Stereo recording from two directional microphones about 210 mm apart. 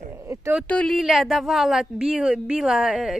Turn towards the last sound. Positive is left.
turn(degrees=0)  # may be behind; listen again after turning